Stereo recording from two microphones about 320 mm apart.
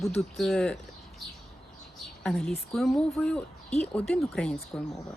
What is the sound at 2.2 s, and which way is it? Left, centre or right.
Speech, centre.